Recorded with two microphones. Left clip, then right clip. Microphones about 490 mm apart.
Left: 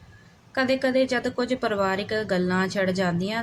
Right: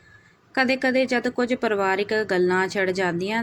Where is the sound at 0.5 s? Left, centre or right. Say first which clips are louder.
Right 1 dB; left.